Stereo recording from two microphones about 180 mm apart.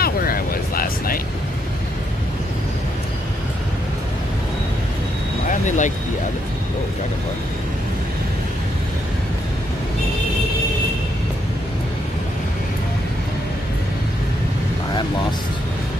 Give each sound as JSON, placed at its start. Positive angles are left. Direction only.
{"t": 0.0, "sound": "vehicle", "side_deg": 55}
{"t": 5.5, "sound": "vehicle", "side_deg": 45}